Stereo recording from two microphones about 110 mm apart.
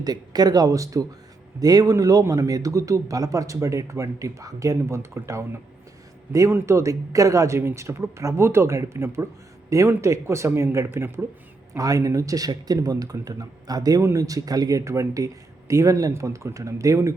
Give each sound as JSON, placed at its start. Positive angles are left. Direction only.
{"t": 0.0, "sound": "a man's voice", "side_deg": -35}
{"t": 11.7, "sound": "speech", "side_deg": -30}